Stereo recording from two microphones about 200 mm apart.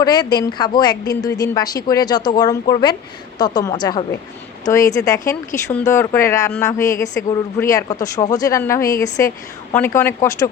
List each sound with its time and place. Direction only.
0.0 s speech: 20° left (ahead or behind)